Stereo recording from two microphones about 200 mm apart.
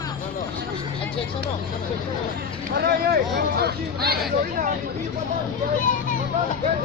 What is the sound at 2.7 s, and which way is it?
Speech, 55° right (ahead or behind).